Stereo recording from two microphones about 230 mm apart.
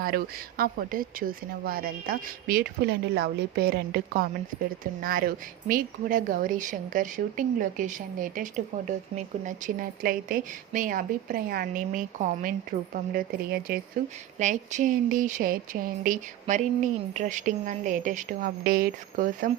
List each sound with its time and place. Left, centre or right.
0.0 s a woman's voice: right